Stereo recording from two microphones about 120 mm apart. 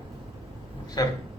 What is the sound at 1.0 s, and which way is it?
Speech, 30° left (ahead or behind).